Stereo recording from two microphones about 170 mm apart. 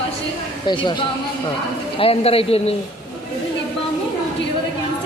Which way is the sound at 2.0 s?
35° left (ahead or behind).